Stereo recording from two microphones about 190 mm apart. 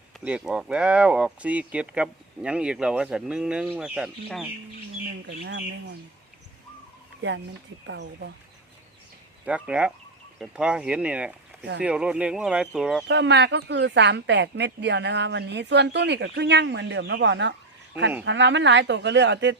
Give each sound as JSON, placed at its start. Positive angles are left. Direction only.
{"t": 0.2, "sound": "speech", "side_deg": -5}
{"t": 5.2, "sound": "speech", "side_deg": -60}
{"t": 7.2, "sound": "speech", "side_deg": -80}
{"t": 7.9, "sound": "speech", "side_deg": -65}
{"t": 9.5, "sound": "speech", "side_deg": -5}
{"t": 13.1, "sound": "speech", "side_deg": -65}